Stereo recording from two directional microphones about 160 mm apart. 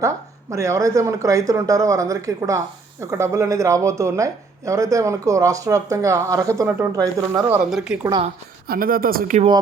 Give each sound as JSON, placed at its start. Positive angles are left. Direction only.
{"t": 0.5, "sound": "speech", "side_deg": -20}
{"t": 7.6, "sound": "a woman's voice", "side_deg": -5}
{"t": 8.6, "sound": "speech", "side_deg": -65}